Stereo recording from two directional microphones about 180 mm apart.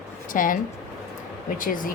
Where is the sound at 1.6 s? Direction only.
50° left (ahead or behind).